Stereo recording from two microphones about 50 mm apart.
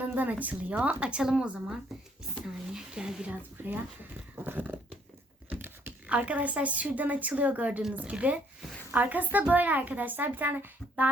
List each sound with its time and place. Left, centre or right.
0.2 s a woman's voice: right
0.8 s a woman's voice: right
3.6 s a woman's voice: right
4.4 s a sound: right
5.8 s a woman's voice: right
8.9 s a woman's voice: right